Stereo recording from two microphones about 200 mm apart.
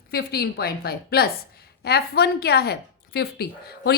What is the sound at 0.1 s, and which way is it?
A woman's voice, 50° left (ahead or behind).